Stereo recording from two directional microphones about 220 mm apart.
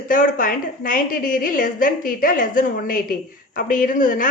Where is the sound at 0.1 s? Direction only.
40° left (ahead or behind).